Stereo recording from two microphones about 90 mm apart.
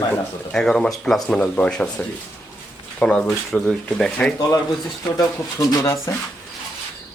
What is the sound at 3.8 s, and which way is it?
Speech, 10° left (ahead or behind).